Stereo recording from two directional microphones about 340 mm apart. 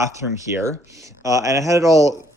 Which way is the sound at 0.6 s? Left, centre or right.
Centre.